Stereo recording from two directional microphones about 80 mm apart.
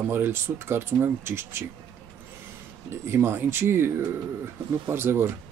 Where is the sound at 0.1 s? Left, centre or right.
Right.